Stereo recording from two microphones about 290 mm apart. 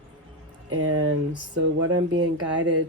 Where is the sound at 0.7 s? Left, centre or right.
Right.